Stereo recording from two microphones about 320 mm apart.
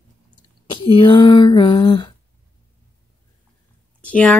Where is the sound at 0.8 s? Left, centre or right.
Centre.